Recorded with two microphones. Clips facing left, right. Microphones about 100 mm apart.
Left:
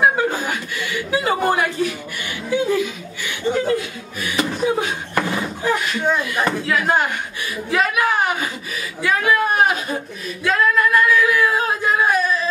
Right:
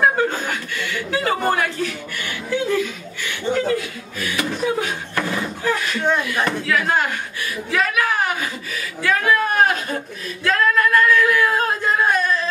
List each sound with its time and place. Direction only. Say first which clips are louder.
0.0 s chuckle: left 1 dB; 10° left (ahead or behind)
4.2 s speech: left 2 dB; 20° left (ahead or behind)
6.0 s speech: even; 5° left (ahead or behind)
6.7 s speech: left 1 dB; 20° left (ahead or behind)
7.7 s a sound: left 2 dB; 20° left (ahead or behind)
10.4 s singing: even; 10° left (ahead or behind)